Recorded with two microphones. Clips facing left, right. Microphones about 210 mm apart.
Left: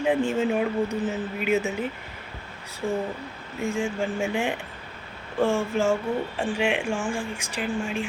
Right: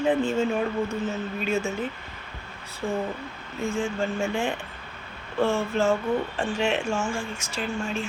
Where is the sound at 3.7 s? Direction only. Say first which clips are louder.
Even; 15° left (ahead or behind).